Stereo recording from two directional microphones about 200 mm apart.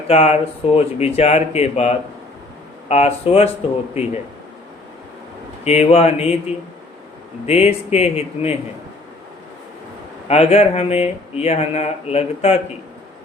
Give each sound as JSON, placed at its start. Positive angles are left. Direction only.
{"t": 0.1, "sound": "speech", "side_deg": 30}
{"t": 5.6, "sound": "speech", "side_deg": 30}
{"t": 7.4, "sound": "speech", "side_deg": 30}
{"t": 10.2, "sound": "speech", "side_deg": 30}